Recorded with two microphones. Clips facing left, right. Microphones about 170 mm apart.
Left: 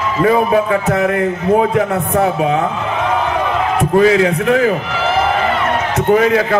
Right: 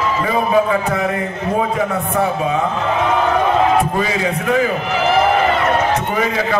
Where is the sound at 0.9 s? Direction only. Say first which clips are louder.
Left 5 dB; 65° left (ahead or behind).